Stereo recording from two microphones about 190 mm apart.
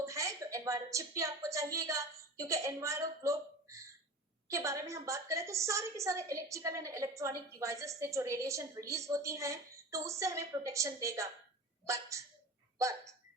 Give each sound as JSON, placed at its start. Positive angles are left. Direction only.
{"t": 0.0, "sound": "a woman's voice", "side_deg": -15}